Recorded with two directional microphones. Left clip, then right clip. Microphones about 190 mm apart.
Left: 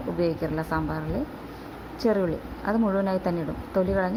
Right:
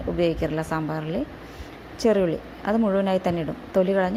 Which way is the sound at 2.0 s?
40° right (ahead or behind).